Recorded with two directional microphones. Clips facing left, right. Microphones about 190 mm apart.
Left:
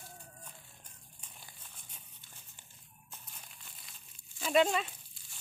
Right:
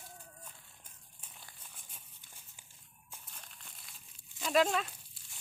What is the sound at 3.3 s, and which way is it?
Crumpling, 5° left (ahead or behind).